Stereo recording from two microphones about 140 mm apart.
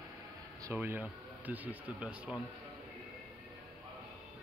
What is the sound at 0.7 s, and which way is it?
Speech, 10° right (ahead or behind).